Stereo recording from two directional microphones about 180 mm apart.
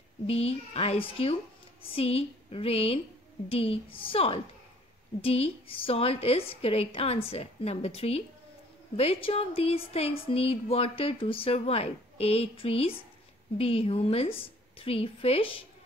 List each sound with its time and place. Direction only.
0.3 s speech: 35° left (ahead or behind)